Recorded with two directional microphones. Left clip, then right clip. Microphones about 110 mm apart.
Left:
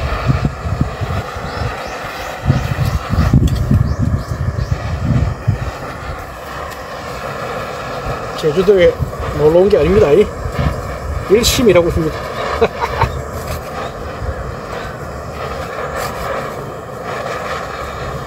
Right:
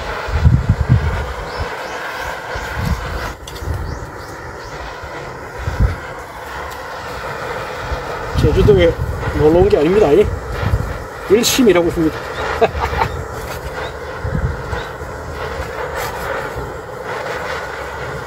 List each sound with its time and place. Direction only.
0.1 s vehicle: 30° right (ahead or behind)
8.4 s speech: 45° right (ahead or behind)
9.2 s speech: 30° right (ahead or behind)
12.4 s a sound: 30° right (ahead or behind)
15.8 s vehicle: 30° right (ahead or behind)